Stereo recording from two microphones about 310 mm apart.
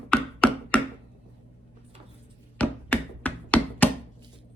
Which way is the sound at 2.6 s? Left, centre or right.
Centre.